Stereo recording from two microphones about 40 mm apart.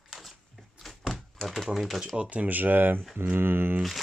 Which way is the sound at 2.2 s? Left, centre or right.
Right.